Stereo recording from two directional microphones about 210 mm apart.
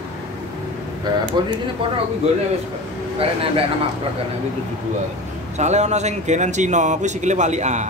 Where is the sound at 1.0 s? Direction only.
20° right (ahead or behind).